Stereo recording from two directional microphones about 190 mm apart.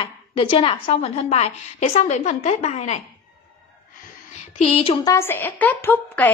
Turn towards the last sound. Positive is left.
turn(degrees=10)  # may be behind; listen again after turning